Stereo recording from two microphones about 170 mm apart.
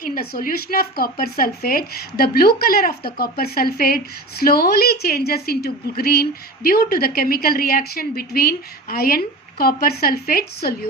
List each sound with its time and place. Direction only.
0.0 s speech: 60° left (ahead or behind)